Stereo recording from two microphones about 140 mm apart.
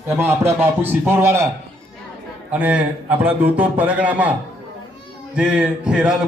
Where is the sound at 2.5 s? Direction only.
10° right (ahead or behind).